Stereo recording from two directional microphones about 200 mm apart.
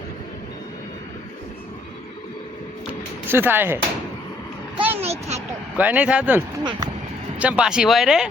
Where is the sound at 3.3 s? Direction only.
10° right (ahead or behind).